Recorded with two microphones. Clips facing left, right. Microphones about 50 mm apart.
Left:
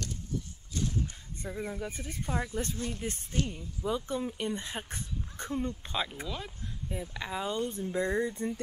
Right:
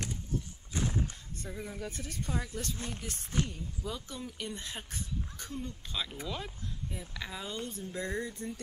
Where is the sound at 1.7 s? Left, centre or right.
Centre.